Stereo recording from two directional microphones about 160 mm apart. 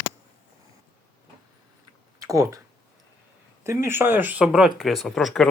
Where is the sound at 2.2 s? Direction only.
20° right (ahead or behind).